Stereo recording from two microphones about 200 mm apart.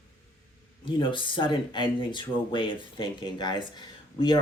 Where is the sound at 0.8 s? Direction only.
25° left (ahead or behind).